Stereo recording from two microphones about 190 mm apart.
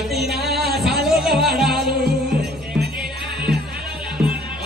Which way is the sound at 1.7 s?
55° right (ahead or behind).